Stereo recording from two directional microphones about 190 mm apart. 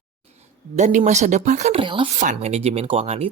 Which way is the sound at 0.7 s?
40° right (ahead or behind).